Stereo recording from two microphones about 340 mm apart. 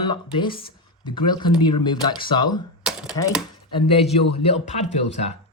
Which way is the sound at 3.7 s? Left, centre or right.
Centre.